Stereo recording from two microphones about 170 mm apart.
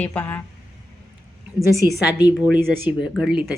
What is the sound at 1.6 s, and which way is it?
Speech, 15° right (ahead or behind).